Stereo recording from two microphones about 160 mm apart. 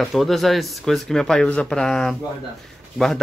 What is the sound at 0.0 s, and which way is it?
Speech, centre (ahead or behind).